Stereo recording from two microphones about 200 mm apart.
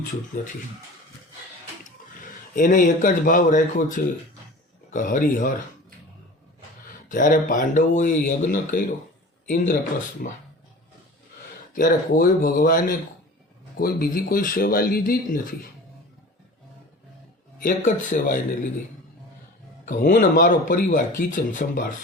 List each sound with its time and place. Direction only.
0.3 s speech: 40° left (ahead or behind)
2.6 s speech: 40° left (ahead or behind)
7.1 s speech: 40° left (ahead or behind)
10.2 s speech: 45° left (ahead or behind)
11.7 s speech: 45° left (ahead or behind)
17.6 s speech: 45° left (ahead or behind)
19.8 s speech: 40° left (ahead or behind)